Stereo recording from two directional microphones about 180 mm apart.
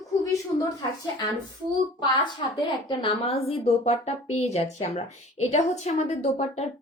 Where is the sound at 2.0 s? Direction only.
25° left (ahead or behind).